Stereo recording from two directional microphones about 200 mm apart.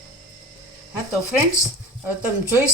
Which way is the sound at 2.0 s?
10° right (ahead or behind).